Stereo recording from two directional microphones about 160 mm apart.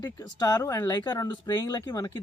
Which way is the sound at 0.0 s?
20° left (ahead or behind).